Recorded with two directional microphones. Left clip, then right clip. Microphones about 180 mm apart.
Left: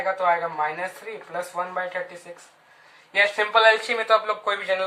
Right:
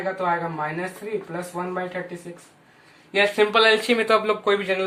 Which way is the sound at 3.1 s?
20° right (ahead or behind).